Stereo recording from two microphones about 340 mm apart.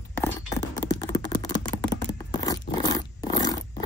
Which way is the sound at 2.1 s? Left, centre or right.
Centre.